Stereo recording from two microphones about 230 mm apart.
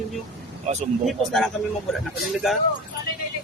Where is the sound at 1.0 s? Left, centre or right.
Centre.